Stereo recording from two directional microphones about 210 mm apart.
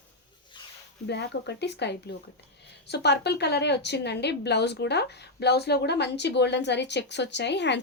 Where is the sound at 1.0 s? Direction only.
55° left (ahead or behind).